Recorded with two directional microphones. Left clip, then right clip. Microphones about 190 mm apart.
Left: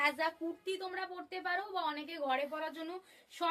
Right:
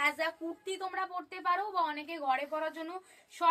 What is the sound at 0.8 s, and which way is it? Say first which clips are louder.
A woman's voice: right 5 dB; 15° left (ahead or behind).